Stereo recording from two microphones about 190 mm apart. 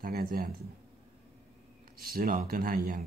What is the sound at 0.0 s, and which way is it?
Speech, 50° right (ahead or behind).